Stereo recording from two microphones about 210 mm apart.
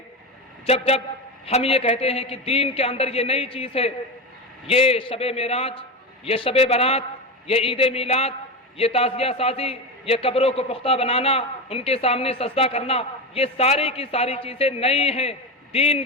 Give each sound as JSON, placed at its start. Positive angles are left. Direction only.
{"t": 0.6, "sound": "a man's voice", "side_deg": 30}